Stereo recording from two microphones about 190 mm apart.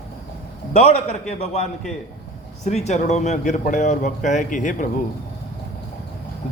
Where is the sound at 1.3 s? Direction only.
35° left (ahead or behind).